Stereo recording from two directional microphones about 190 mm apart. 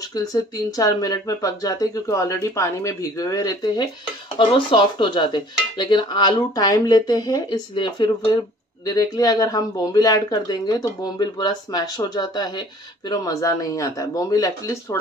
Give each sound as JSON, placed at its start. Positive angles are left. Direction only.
{"t": 0.1, "sound": "dishes", "side_deg": 20}
{"t": 13.1, "sound": "speech", "side_deg": 20}